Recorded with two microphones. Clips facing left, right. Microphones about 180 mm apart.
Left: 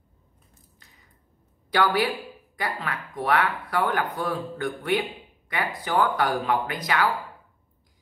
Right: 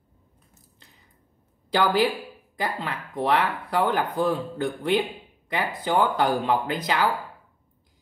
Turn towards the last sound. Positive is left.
turn(degrees=-25)  # may be behind; listen again after turning